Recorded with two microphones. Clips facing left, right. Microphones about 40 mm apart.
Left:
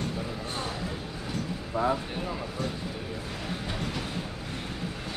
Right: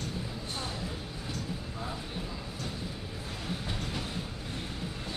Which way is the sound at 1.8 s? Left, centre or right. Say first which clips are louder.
Left 15 dB; left.